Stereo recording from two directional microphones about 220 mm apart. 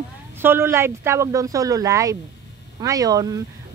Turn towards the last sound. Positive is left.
turn(degrees=-15)  # may be behind; listen again after turning